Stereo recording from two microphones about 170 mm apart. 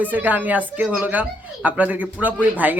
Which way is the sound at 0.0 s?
10° right (ahead or behind).